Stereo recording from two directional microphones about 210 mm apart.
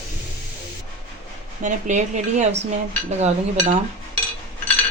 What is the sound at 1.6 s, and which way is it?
Speech, 35° right (ahead or behind).